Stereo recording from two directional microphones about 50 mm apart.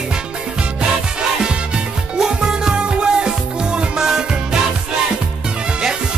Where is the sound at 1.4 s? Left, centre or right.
Centre.